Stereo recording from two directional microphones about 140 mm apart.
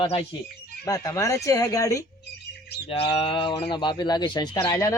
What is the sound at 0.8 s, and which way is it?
Speech, 25° left (ahead or behind).